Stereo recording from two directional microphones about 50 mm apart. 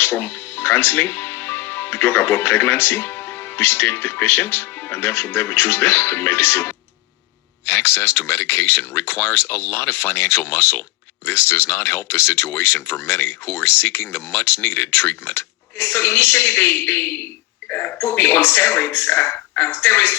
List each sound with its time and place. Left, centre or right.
0.0 s speech: left
17.7 s speech: left